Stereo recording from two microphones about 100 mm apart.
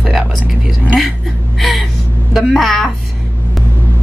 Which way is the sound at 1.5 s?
Centre (ahead or behind).